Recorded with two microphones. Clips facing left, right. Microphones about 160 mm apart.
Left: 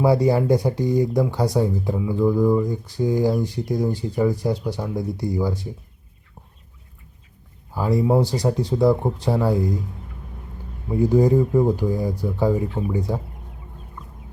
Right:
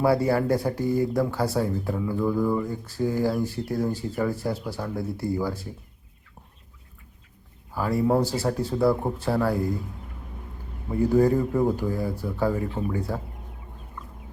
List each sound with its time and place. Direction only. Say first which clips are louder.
0.0 s speech: left 3 dB; 15° left (ahead or behind)
7.7 s speech: left 3 dB; 15° left (ahead or behind)
10.8 s speech: left 3 dB; 15° left (ahead or behind)